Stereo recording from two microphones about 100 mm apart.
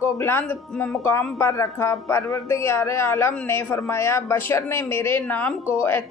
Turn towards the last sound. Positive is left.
turn(degrees=20)  # may be behind; listen again after turning